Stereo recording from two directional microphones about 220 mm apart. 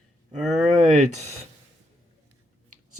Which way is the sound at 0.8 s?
35° right (ahead or behind).